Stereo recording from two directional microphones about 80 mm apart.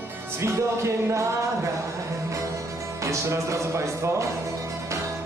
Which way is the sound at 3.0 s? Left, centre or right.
Right.